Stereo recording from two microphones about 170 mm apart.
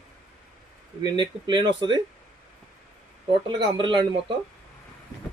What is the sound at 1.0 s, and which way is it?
Speech, 25° right (ahead or behind).